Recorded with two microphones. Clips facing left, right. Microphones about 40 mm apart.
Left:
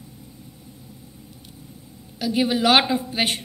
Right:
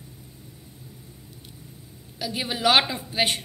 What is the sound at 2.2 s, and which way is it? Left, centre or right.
A woman's voice, centre.